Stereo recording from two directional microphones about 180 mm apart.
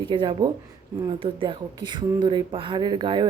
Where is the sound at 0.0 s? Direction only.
25° right (ahead or behind).